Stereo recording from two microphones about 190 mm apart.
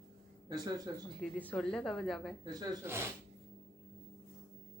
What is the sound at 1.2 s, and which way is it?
A woman's voice, 5° left (ahead or behind).